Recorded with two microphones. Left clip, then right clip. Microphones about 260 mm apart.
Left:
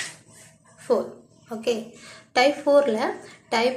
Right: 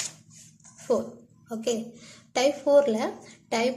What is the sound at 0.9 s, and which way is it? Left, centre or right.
Speech, centre.